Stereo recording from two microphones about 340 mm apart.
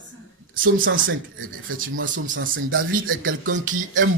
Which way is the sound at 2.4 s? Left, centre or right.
Right.